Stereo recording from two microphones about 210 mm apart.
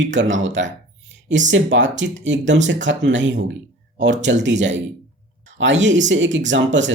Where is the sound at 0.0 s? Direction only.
60° right (ahead or behind).